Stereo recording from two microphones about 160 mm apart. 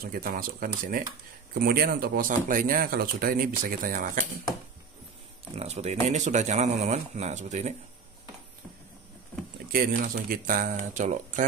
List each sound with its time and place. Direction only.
0.0 s speech: 65° right (ahead or behind)
5.6 s speech: 45° right (ahead or behind)
9.7 s speech: 70° right (ahead or behind); by 11.4 s 50° right (ahead or behind)